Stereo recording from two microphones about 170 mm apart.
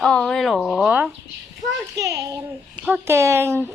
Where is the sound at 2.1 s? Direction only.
20° right (ahead or behind).